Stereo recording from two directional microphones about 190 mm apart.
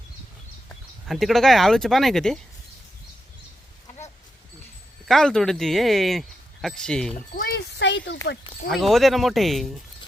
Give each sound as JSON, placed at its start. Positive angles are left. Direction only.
{"t": 1.0, "sound": "speech", "side_deg": 0}
{"t": 5.0, "sound": "speech", "side_deg": 0}
{"t": 7.3, "sound": "a sound", "side_deg": 60}
{"t": 8.7, "sound": "speech", "side_deg": 0}